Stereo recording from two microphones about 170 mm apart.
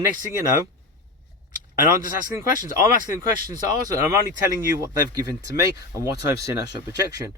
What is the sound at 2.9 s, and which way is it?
Speech, 50° right (ahead or behind).